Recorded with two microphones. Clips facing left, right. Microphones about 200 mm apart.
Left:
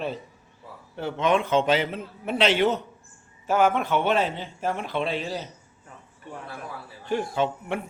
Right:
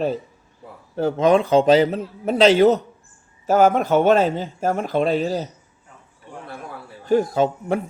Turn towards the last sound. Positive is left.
turn(degrees=-40)  # may be behind; listen again after turning